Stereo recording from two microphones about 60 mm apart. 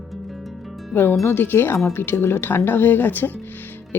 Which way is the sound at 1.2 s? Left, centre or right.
Left.